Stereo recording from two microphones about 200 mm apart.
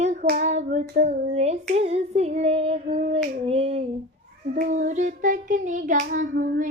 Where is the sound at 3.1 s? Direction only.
30° right (ahead or behind).